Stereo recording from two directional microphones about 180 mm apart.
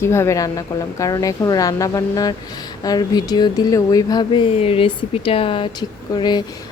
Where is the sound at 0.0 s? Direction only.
15° left (ahead or behind).